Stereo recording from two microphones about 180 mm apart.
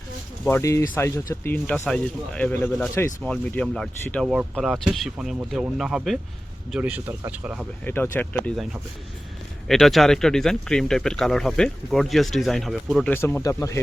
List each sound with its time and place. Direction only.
0.5 s speech: 15° left (ahead or behind); by 7.7 s 10° right (ahead or behind)
7.9 s speech: 10° left (ahead or behind)
9.6 s speech: centre (ahead or behind)
13.1 s speech: 15° left (ahead or behind)